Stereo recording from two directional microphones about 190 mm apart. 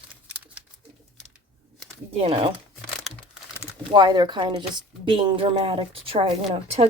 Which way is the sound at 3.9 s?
20° right (ahead or behind).